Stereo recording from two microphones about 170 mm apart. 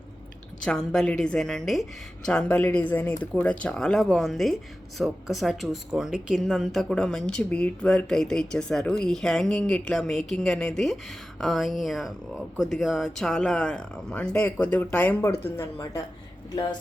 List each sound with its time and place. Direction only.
0.6 s speech: 5° left (ahead or behind)